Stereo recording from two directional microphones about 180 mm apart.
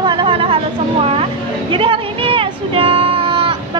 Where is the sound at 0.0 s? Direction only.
25° right (ahead or behind).